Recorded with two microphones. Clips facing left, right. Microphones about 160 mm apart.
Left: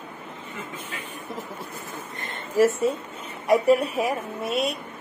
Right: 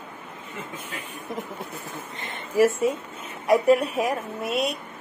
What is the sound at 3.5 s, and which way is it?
A woman's voice, centre (ahead or behind).